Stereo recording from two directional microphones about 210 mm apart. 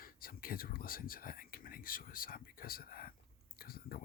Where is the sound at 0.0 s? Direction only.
45° left (ahead or behind).